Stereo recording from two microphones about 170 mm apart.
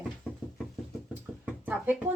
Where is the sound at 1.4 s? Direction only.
10° right (ahead or behind).